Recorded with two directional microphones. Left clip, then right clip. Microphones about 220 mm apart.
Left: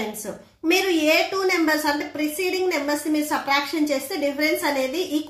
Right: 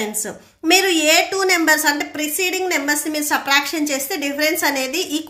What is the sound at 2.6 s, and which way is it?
Speech, 45° right (ahead or behind).